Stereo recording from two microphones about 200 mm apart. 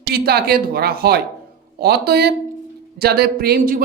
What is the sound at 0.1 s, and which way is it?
Speech, 50° right (ahead or behind).